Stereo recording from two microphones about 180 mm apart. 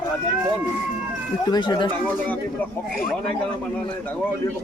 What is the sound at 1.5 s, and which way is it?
Speech, 25° left (ahead or behind).